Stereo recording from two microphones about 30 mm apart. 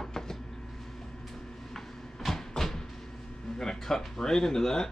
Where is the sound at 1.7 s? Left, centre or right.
Centre.